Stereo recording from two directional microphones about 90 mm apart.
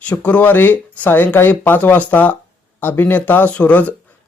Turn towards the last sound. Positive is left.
turn(degrees=15)  # may be behind; listen again after turning